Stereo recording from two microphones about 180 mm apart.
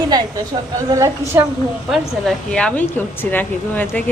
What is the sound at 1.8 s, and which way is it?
Speech, centre (ahead or behind).